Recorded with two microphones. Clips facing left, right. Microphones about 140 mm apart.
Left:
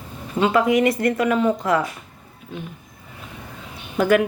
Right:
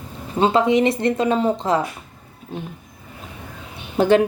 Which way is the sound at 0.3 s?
30° right (ahead or behind).